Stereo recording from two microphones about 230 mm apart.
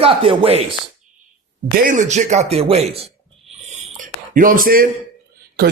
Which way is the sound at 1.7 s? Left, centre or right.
Right.